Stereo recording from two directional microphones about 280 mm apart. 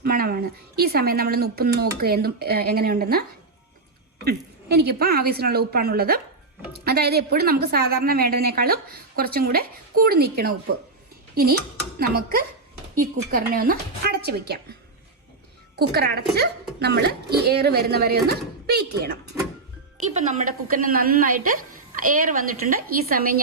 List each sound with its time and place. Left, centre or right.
0.0 s speech: right
11.9 s speech: right